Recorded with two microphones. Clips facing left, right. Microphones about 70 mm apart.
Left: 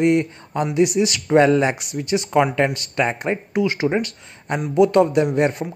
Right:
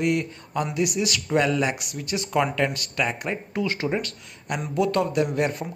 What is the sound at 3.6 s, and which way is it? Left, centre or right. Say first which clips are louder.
Speech: left 6 dB; centre.